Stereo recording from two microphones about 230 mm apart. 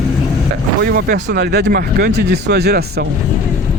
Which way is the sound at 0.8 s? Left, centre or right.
Right.